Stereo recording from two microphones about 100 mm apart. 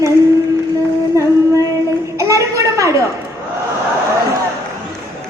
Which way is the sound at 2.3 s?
30° right (ahead or behind).